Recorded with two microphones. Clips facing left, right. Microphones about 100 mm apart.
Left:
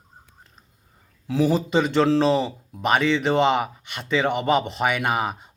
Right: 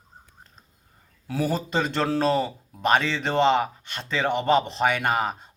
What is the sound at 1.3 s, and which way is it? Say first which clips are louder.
Speech: left 5 dB; 20° left (ahead or behind).